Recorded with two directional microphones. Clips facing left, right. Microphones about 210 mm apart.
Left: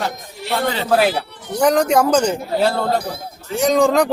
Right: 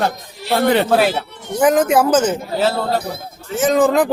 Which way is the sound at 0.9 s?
Centre (ahead or behind).